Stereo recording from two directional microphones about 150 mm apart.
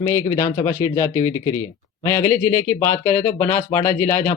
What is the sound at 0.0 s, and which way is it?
Speech, 20° left (ahead or behind).